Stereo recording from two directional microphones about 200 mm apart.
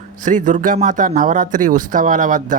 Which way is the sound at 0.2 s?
40° right (ahead or behind).